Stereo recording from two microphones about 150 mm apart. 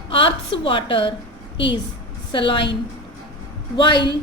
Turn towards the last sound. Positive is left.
turn(degrees=30)  # may be behind; listen again after turning